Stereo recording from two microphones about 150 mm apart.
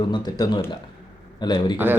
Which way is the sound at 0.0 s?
30° left (ahead or behind).